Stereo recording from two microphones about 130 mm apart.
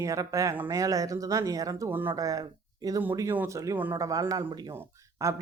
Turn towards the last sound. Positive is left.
turn(degrees=-20)  # may be behind; listen again after turning